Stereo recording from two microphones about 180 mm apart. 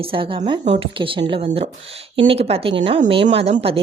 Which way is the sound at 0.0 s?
30° right (ahead or behind).